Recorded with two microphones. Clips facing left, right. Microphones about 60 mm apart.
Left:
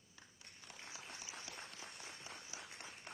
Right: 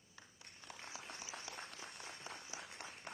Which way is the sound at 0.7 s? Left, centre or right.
Right.